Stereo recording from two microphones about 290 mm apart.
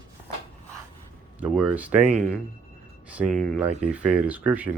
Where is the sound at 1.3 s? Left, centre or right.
Centre.